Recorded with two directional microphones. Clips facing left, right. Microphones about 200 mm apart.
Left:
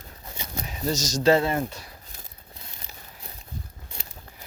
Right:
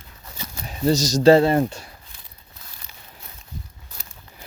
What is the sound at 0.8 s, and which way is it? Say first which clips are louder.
Speech: right 7 dB; 35° right (ahead or behind).